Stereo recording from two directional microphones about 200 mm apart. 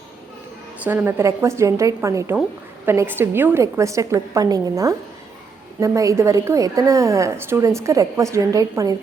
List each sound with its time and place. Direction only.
0.9 s a woman's voice: 10° right (ahead or behind)